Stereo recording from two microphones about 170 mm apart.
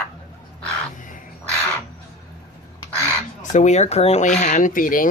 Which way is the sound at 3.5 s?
45° left (ahead or behind).